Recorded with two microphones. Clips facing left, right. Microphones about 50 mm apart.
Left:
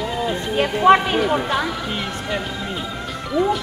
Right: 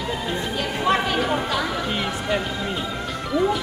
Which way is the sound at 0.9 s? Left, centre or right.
Left.